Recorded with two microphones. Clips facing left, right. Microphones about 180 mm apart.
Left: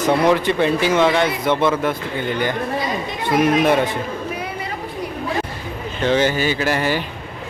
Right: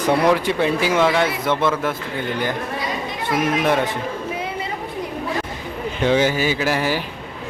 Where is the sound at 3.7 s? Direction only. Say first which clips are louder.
Left 2 dB; centre (ahead or behind).